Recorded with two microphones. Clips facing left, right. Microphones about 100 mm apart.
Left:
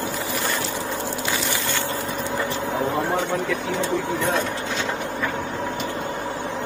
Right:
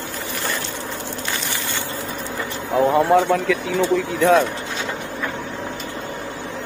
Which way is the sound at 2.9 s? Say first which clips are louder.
Right 7 dB; 75° right (ahead or behind).